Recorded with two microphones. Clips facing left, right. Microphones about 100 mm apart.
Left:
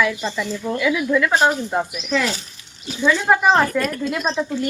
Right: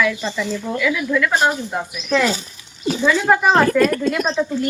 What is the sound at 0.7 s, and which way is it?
Speech, 20° left (ahead or behind).